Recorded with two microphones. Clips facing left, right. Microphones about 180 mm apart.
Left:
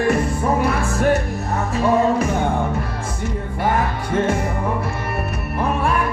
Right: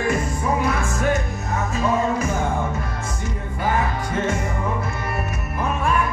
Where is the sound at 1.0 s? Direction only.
60° left (ahead or behind).